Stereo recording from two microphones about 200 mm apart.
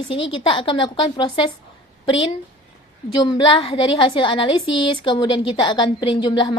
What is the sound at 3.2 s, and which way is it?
A woman's voice, 25° left (ahead or behind).